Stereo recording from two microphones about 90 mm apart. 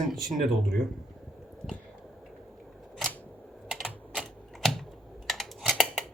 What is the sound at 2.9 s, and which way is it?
Camera, 10° left (ahead or behind).